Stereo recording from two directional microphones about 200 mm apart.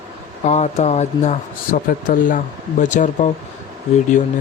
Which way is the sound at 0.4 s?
35° left (ahead or behind).